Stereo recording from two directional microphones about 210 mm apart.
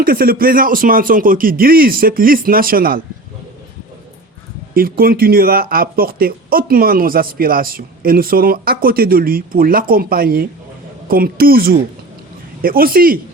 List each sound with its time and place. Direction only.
0.0 s speech: 45° right (ahead or behind)
4.7 s speech: 45° right (ahead or behind)